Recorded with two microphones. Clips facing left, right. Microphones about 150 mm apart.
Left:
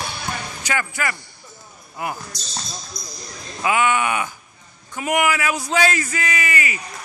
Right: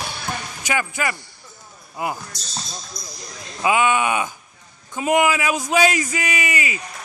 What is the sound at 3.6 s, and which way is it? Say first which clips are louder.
A man's voice: right 1 dB; 20° right (ahead or behind).